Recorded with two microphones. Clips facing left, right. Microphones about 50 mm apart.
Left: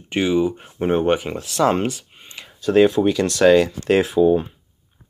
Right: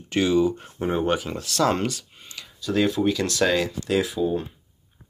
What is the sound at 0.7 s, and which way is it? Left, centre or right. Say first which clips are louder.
Speech: left 5 dB; left.